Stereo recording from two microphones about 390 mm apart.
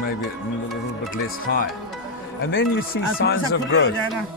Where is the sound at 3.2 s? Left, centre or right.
Left.